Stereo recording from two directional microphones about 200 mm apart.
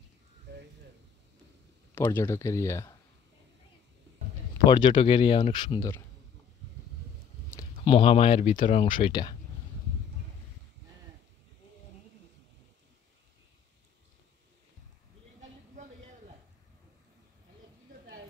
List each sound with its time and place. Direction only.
0.5 s a sound: 60° right (ahead or behind)
2.0 s speech: 10° left (ahead or behind)
4.6 s speech: 25° left (ahead or behind)
7.8 s speech: 25° left (ahead or behind)
8.8 s speech: 25° left (ahead or behind)